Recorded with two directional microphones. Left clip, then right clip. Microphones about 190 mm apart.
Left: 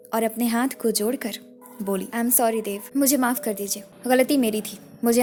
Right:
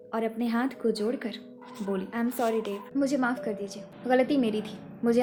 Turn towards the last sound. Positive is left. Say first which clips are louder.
# left 4 dB
turn(degrees=50)  # may be behind; listen again after turning